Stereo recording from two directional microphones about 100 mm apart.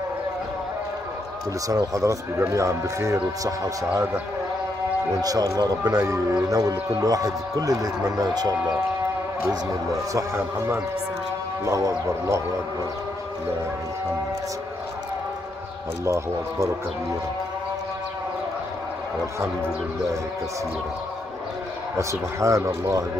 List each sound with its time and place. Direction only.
1.7 s speech: 35° right (ahead or behind)
5.2 s speech: 35° right (ahead or behind)
10.1 s music: 25° right (ahead or behind)
16.1 s music: 30° right (ahead or behind)
21.9 s speech: 30° right (ahead or behind)